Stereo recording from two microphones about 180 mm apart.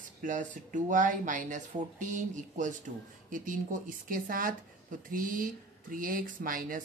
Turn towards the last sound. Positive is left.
turn(degrees=-50)  # may be behind; listen again after turning